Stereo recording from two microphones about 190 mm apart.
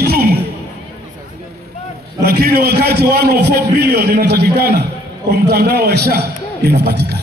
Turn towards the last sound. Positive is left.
turn(degrees=-60)  # may be behind; listen again after turning